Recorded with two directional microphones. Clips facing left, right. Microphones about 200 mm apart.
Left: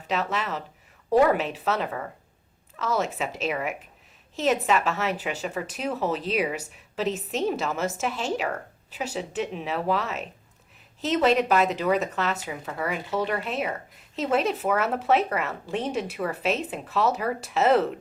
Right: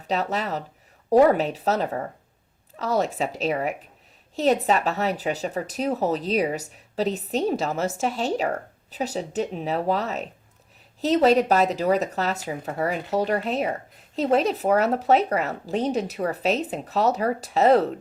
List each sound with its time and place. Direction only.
0.1 s speech: 35° right (ahead or behind)